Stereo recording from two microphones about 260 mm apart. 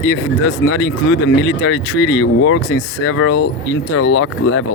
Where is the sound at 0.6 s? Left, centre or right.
Left.